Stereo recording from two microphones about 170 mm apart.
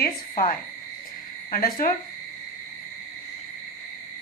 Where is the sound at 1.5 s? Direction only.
55° left (ahead or behind).